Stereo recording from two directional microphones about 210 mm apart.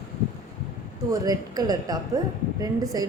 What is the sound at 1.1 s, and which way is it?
Speech, 15° right (ahead or behind).